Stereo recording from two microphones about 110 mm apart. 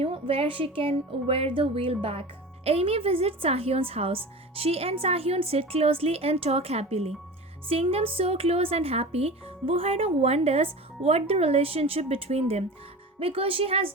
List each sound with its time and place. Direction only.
0.0 s a woman's voice: 60° right (ahead or behind)
13.1 s a woman's voice: 60° right (ahead or behind)